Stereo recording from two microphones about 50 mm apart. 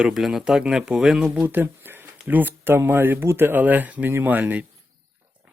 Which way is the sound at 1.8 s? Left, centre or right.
Right.